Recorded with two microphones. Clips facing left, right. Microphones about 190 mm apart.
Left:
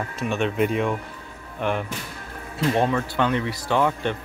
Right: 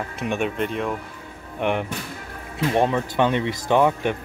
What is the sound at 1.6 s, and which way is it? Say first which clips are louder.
Speech: right 2 dB; 20° right (ahead or behind).